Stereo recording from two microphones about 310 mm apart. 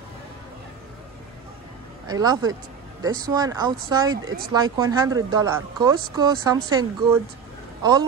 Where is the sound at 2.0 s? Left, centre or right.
Centre.